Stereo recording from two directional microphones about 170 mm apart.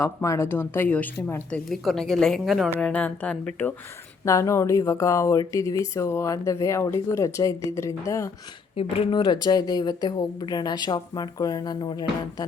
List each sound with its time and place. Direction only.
0.0 s speech: 15° left (ahead or behind)
8.7 s a woman's voice: 35° left (ahead or behind)